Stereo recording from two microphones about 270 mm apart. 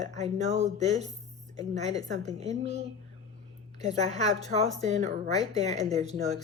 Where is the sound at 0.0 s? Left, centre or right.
Right.